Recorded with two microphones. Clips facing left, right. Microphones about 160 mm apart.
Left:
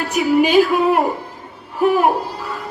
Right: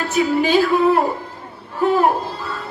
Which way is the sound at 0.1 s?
15° left (ahead or behind).